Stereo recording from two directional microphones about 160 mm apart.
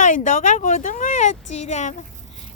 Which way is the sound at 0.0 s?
50° left (ahead or behind).